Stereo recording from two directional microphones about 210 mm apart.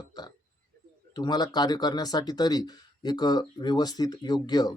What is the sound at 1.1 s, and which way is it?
Speech, 20° left (ahead or behind).